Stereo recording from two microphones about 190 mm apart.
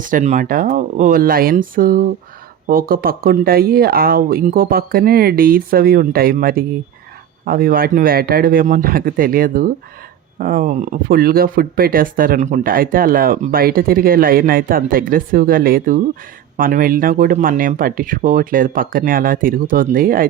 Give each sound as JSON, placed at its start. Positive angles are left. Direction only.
{"t": 0.0, "sound": "speech", "side_deg": -40}